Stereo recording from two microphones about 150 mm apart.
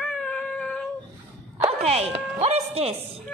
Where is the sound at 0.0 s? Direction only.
5° left (ahead or behind).